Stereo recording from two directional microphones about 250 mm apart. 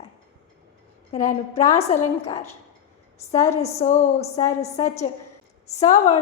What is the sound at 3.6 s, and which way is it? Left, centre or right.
A woman's voice, left.